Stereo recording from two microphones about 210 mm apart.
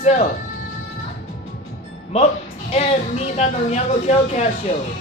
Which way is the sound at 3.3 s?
30° left (ahead or behind).